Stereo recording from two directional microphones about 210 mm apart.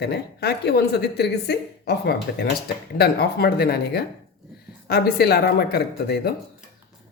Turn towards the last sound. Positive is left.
turn(degrees=50)  # may be behind; listen again after turning